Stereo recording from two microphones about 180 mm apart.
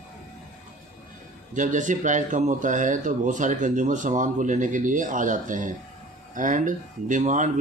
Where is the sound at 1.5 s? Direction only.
45° right (ahead or behind).